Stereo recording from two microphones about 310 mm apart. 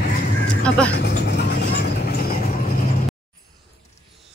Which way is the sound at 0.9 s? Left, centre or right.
Left.